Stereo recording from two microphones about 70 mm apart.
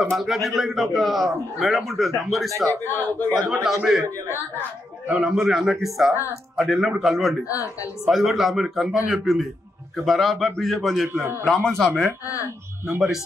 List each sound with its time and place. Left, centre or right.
0.2 s a man's voice: centre
2.5 s a man's voice: right
2.8 s a man's voice: left
3.4 s a man's voice: centre
5.1 s a man's voice: centre
7.4 s a woman's voice: left
8.1 s a man's voice: centre